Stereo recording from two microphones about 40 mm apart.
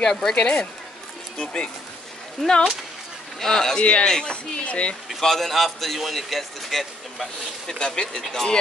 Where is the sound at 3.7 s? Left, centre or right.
Left.